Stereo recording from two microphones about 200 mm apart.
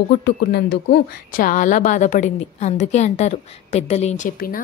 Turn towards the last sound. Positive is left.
turn(degrees=35)  # may be behind; listen again after turning